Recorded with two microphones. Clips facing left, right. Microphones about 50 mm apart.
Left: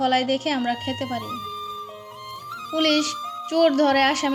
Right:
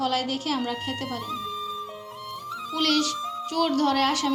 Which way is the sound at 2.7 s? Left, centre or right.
Left.